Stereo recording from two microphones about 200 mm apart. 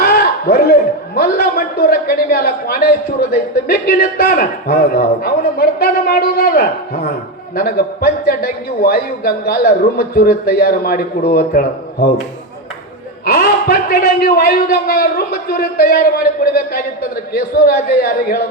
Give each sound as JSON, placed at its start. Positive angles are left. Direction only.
{"t": 0.0, "sound": "a man's voice", "side_deg": 50}
{"t": 13.2, "sound": "a man's voice", "side_deg": 50}